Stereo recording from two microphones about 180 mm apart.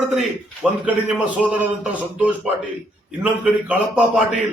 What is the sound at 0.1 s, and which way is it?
A man's voice, 5° right (ahead or behind).